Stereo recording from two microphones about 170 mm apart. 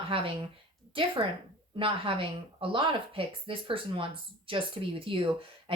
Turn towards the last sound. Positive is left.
turn(degrees=-30)  # may be behind; listen again after turning